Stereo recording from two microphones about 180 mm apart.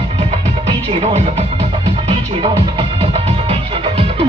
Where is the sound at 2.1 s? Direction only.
30° right (ahead or behind).